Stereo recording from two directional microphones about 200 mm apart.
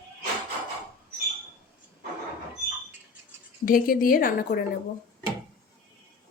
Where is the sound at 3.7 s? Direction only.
45° left (ahead or behind).